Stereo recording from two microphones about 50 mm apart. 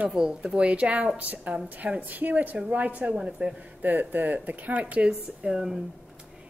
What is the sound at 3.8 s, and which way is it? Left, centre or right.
A woman's voice, right.